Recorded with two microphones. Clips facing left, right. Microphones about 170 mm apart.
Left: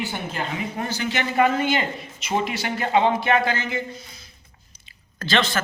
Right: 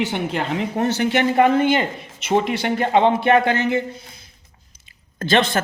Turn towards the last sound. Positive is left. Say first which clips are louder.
# right 5 dB
turn(degrees=-55)  # may be behind; listen again after turning